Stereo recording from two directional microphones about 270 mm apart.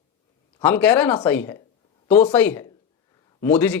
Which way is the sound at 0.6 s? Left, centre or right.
Centre.